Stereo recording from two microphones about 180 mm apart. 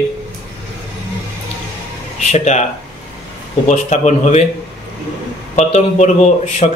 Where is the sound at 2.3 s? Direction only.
40° left (ahead or behind).